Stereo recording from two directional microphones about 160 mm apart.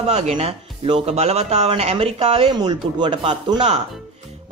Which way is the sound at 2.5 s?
25° right (ahead or behind).